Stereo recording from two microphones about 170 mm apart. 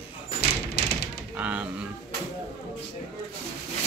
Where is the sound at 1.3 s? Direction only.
10° right (ahead or behind).